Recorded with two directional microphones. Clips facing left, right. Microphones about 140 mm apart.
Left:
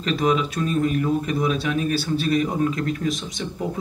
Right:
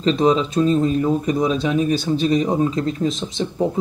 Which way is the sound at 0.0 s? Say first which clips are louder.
Right 5 dB; 25° right (ahead or behind).